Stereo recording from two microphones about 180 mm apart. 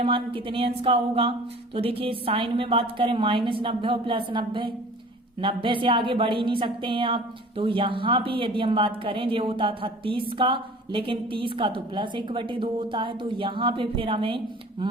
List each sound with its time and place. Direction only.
0.0 s speech: 30° right (ahead or behind)